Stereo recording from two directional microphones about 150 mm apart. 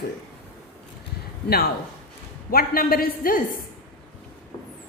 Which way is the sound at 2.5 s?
80° left.